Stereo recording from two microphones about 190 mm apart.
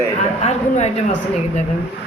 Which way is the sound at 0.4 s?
35° left (ahead or behind).